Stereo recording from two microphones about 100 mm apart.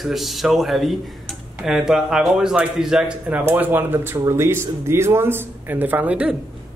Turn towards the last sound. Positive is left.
turn(degrees=-15)  # may be behind; listen again after turning